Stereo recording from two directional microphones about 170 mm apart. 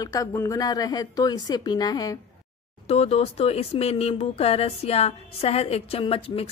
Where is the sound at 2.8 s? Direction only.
35° left (ahead or behind).